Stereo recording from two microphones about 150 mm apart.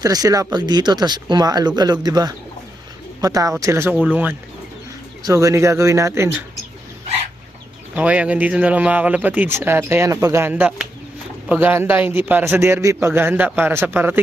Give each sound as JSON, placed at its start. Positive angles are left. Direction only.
{"t": 0.0, "sound": "a man's voice", "side_deg": -25}
{"t": 5.2, "sound": "speech", "side_deg": -20}
{"t": 7.9, "sound": "a man's voice", "side_deg": -10}
{"t": 10.5, "sound": "a man's voice", "side_deg": -5}